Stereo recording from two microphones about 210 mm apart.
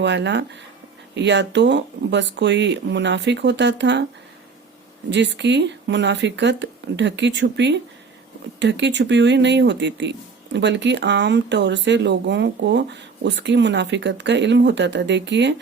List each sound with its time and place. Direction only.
0.0 s speech: 55° right (ahead or behind)
5.0 s speech: 55° right (ahead or behind)